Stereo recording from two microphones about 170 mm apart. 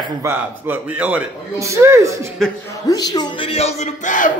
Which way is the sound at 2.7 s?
25° left (ahead or behind).